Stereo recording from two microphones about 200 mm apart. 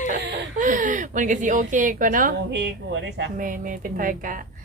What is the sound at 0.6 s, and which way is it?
A woman's voice, 40° right (ahead or behind).